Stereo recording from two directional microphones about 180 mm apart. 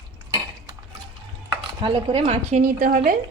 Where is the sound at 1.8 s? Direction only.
30° right (ahead or behind).